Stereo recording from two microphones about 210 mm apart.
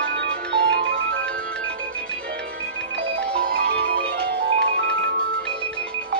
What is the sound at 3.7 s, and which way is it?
Music, 55° right (ahead or behind).